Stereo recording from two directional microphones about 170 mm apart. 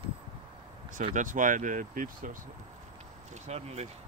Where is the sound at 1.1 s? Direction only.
50° right (ahead or behind).